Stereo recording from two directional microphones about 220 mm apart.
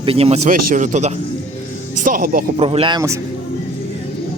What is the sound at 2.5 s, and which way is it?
Speech, 25° right (ahead or behind).